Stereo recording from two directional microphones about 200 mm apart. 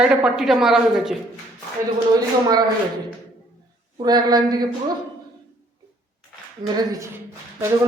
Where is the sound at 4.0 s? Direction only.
20° right (ahead or behind).